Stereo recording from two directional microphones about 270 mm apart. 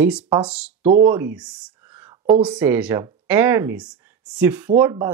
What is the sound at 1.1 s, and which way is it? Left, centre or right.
Speech, centre.